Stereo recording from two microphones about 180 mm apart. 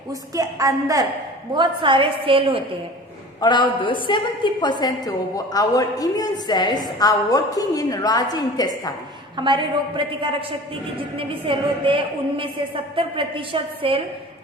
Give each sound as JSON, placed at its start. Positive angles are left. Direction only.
{"t": 0.1, "sound": "a woman's voice", "side_deg": -20}
{"t": 3.4, "sound": "a woman's voice", "side_deg": 25}
{"t": 9.3, "sound": "a woman's voice", "side_deg": -25}